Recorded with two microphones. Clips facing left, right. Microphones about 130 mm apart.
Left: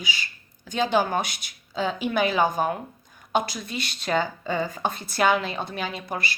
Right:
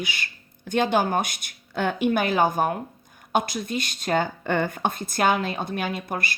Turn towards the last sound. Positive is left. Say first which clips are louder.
# right 2 dB
turn(degrees=-50)  # may be behind; listen again after turning